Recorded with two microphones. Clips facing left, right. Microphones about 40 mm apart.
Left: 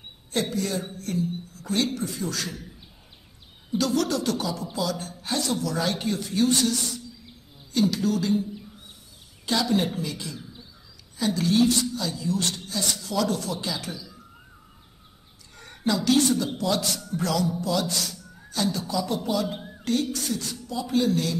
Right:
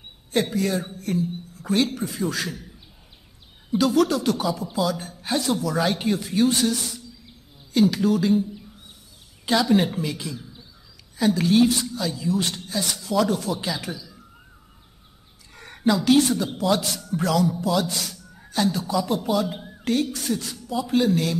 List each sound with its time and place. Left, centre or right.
0.3 s a woman's voice: centre
3.7 s speech: centre
8.4 s a sound: centre
9.5 s speech: right
10.3 s bird: centre
11.1 s speech: centre
15.5 s a woman's voice: centre
19.1 s speech: centre
19.4 s speech: centre
19.8 s speech: right